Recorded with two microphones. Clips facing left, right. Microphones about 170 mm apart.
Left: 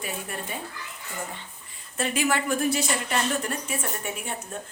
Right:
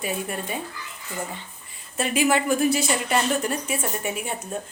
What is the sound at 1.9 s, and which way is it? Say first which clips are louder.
A woman's voice: right 4 dB; 15° right (ahead or behind).